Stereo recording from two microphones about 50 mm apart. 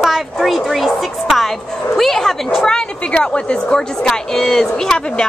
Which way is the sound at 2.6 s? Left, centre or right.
Centre.